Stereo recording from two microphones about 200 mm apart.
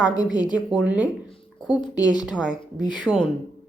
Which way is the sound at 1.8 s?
20° left (ahead or behind).